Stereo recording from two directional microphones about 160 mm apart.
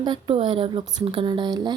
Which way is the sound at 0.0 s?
30° right (ahead or behind).